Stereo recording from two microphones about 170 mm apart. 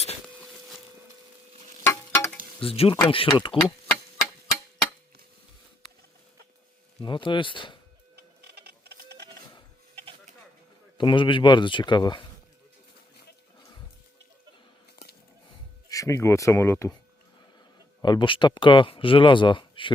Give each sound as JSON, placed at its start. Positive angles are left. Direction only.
{"t": 0.3, "sound": "a sound", "side_deg": 0}
{"t": 1.8, "sound": "a sound", "side_deg": 15}
{"t": 2.6, "sound": "speech", "side_deg": 35}
{"t": 7.0, "sound": "speech", "side_deg": 30}
{"t": 8.1, "sound": "printer", "side_deg": -70}
{"t": 9.9, "sound": "sheep", "side_deg": -35}
{"t": 10.9, "sound": "speech", "side_deg": 30}
{"t": 15.4, "sound": "a sound", "side_deg": 20}
{"t": 18.0, "sound": "speech", "side_deg": 25}